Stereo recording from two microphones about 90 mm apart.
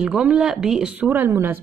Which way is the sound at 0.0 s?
10° right (ahead or behind).